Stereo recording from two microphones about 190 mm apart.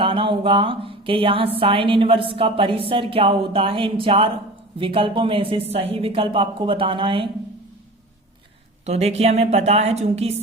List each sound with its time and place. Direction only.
0.0 s a woman's voice: 25° right (ahead or behind)
8.9 s a woman's voice: 35° right (ahead or behind)